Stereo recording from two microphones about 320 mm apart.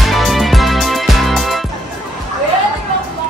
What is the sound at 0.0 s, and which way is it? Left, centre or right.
Music, centre.